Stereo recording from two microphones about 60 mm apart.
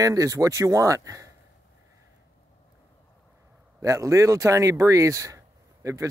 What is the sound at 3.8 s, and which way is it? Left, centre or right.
Speech, right.